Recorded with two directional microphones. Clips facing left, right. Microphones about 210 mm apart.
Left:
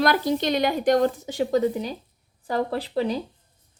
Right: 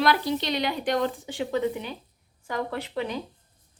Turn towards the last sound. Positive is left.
turn(degrees=35)  # may be behind; listen again after turning